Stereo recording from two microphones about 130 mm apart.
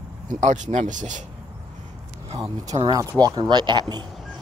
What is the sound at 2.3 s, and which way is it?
Speech, 25° right (ahead or behind).